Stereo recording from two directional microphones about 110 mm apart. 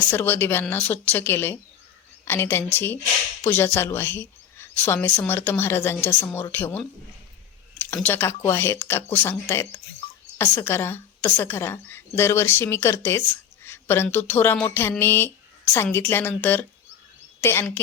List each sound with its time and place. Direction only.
0.1 s a woman's voice: 20° left (ahead or behind)
8.0 s a woman's voice: 20° left (ahead or behind)